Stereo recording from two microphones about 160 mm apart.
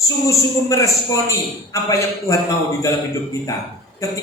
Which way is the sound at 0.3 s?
20° left (ahead or behind).